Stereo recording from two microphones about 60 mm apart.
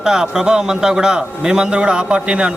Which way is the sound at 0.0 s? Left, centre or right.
Centre.